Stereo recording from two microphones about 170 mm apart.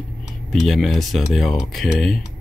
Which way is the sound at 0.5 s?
Centre (ahead or behind).